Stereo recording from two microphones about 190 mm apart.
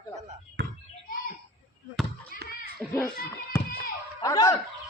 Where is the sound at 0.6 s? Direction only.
65° right (ahead or behind).